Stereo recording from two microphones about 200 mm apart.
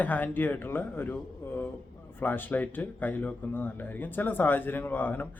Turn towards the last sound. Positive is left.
turn(degrees=10)  # may be behind; listen again after turning